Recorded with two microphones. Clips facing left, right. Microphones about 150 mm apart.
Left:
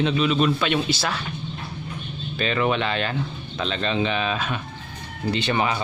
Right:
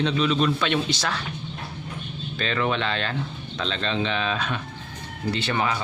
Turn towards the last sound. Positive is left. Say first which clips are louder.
# left 2 dB
turn(degrees=20)  # may be behind; listen again after turning